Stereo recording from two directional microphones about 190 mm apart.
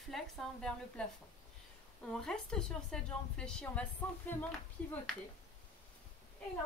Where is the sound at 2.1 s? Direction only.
5° left (ahead or behind).